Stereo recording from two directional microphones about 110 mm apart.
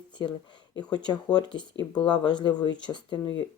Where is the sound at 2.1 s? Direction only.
45° left (ahead or behind).